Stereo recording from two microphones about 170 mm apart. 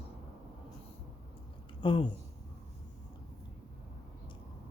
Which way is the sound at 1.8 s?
30° left (ahead or behind).